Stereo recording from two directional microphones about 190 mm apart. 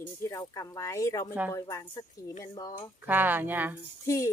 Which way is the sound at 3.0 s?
10° right (ahead or behind).